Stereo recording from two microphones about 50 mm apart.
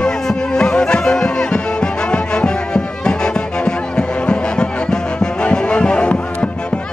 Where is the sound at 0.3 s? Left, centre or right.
Centre.